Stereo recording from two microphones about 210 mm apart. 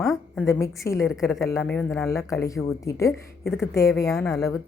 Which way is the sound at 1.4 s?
10° left (ahead or behind).